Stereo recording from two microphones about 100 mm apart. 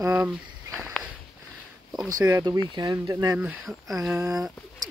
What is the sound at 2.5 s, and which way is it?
Speech, 45° right (ahead or behind).